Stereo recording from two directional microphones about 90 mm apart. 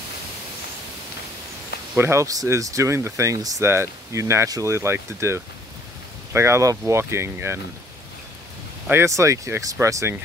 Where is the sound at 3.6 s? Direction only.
30° right (ahead or behind).